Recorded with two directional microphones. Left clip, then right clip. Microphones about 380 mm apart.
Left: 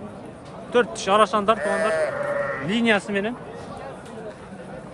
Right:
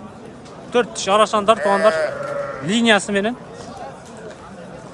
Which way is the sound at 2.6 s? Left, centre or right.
Centre.